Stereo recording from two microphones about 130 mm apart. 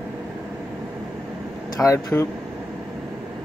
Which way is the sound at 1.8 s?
25° left (ahead or behind).